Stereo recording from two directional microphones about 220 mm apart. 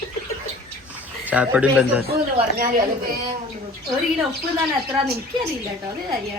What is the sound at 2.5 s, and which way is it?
Speech, 40° right (ahead or behind).